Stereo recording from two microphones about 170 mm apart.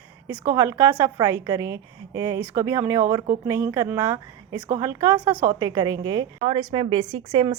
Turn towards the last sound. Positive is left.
turn(degrees=-30)  # may be behind; listen again after turning